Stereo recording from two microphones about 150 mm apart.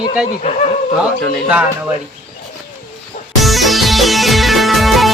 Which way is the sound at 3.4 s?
Centre (ahead or behind).